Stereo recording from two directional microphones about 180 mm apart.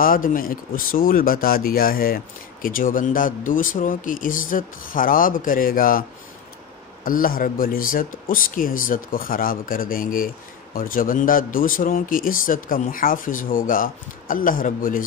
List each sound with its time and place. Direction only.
0.0 s speech: 50° left (ahead or behind)
7.1 s speech: 50° left (ahead or behind)